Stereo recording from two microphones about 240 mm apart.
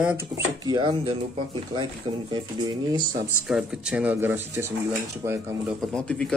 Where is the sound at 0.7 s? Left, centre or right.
Right.